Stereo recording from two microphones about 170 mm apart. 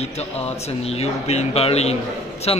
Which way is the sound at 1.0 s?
35° left (ahead or behind).